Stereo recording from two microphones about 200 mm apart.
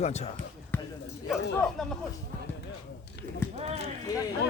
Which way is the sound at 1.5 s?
5° left (ahead or behind).